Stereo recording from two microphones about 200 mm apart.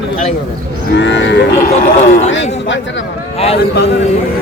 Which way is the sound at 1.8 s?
35° left (ahead or behind).